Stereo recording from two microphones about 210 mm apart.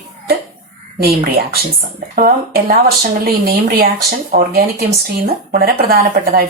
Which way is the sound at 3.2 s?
45° right (ahead or behind).